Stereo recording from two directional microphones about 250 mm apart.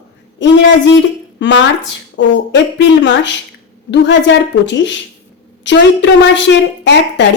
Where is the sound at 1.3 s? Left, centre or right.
Left.